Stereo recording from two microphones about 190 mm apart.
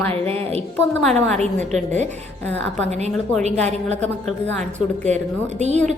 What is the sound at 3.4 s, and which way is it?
Speech, 35° right (ahead or behind).